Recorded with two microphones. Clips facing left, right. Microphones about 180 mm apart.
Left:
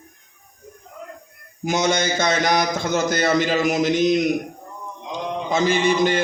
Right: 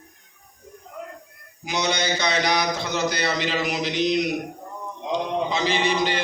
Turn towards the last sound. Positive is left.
turn(degrees=50)  # may be behind; listen again after turning